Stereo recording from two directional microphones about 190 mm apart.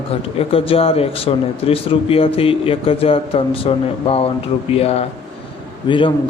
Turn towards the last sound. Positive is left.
turn(degrees=25)  # may be behind; listen again after turning